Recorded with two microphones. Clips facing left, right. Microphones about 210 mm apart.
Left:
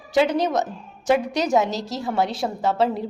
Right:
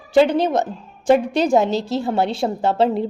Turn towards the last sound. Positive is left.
turn(degrees=-30)  # may be behind; listen again after turning